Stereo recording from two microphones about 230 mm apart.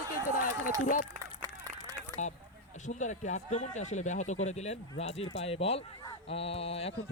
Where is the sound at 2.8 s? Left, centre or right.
Left.